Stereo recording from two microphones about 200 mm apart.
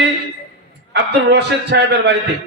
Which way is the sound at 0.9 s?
55° right (ahead or behind).